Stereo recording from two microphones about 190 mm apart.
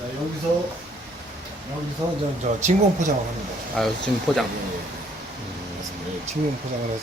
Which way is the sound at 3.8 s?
5° left (ahead or behind).